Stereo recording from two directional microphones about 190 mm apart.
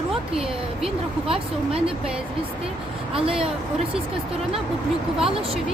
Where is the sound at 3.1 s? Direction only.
30° right (ahead or behind).